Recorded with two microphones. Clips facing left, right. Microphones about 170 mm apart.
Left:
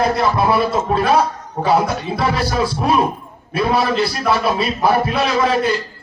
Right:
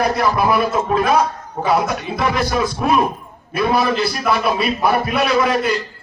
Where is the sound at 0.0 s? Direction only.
25° left (ahead or behind).